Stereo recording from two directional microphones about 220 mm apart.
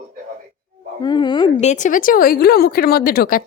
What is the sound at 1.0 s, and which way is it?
A woman's voice, 20° left (ahead or behind).